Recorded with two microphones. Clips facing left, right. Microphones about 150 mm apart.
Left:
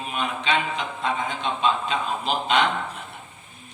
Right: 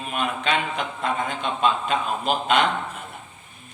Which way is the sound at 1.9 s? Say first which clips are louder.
Right 2 dB; 50° right (ahead or behind).